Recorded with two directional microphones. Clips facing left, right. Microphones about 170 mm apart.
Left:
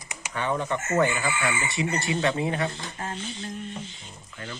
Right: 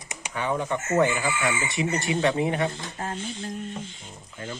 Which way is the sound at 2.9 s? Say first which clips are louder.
Right 2 dB; 45° right (ahead or behind).